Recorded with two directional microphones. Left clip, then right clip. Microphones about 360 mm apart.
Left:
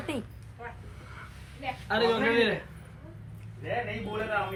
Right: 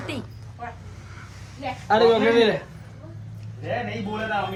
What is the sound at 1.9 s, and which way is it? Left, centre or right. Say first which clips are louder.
Speech: right 8 dB; centre.